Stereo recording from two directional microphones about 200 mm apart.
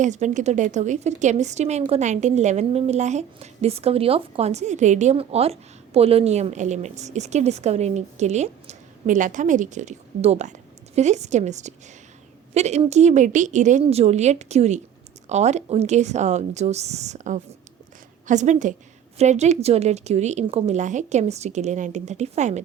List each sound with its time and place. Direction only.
0.0 s a woman's voice: 35° right (ahead or behind)